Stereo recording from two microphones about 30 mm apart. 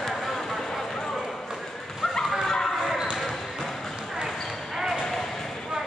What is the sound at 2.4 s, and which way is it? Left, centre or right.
Bow-wow, centre.